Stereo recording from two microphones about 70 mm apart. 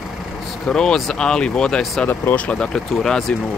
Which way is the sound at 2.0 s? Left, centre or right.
Left.